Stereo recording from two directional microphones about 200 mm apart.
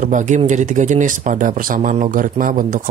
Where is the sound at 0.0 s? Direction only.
40° right (ahead or behind).